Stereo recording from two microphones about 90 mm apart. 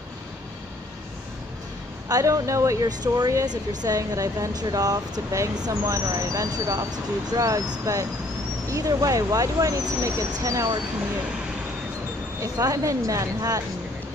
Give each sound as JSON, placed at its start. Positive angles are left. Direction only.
{"t": 2.0, "sound": "speech", "side_deg": -40}
{"t": 12.4, "sound": "speech", "side_deg": -40}